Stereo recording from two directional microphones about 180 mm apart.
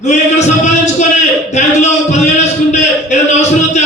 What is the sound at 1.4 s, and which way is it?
A man's voice, 40° left (ahead or behind).